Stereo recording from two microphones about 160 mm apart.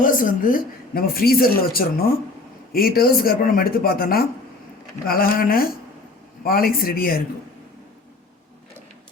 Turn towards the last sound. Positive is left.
turn(degrees=65)  # may be behind; listen again after turning